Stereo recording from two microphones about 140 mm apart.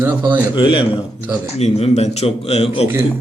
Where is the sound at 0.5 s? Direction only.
40° left (ahead or behind).